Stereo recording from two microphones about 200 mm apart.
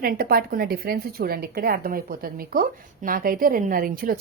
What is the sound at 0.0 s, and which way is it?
A woman's voice, 50° right (ahead or behind).